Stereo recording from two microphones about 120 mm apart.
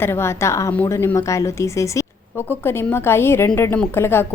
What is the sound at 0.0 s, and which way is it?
A woman's voice, 20° left (ahead or behind).